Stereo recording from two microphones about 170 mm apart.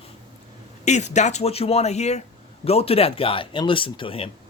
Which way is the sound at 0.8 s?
45° left (ahead or behind).